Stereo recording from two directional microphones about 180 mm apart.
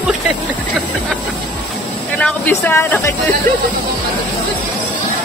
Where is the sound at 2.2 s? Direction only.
10° left (ahead or behind).